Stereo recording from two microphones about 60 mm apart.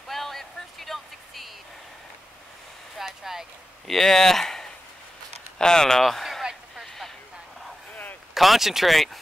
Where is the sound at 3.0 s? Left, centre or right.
Centre.